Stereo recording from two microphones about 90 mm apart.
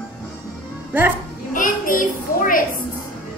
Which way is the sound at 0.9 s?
20° right (ahead or behind).